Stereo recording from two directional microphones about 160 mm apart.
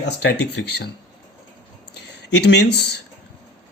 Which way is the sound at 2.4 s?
90° left.